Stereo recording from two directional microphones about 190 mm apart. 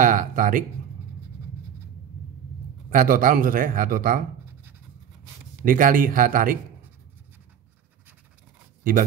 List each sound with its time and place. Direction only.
0.0 s speech: 45° right (ahead or behind)
2.9 s speech: 45° right (ahead or behind)
5.6 s speech: 45° right (ahead or behind)